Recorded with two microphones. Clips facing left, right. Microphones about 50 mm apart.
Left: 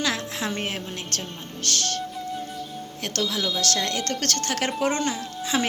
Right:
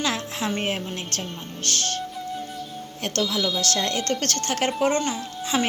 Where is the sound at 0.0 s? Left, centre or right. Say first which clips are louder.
Right 1 dB; centre.